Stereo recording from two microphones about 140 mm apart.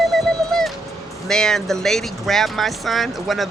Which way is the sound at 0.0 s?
Centre (ahead or behind).